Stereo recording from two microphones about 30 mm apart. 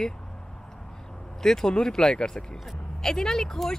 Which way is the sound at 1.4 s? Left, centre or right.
Centre.